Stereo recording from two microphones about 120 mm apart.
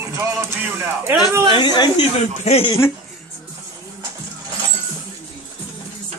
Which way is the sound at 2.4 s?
60° left (ahead or behind).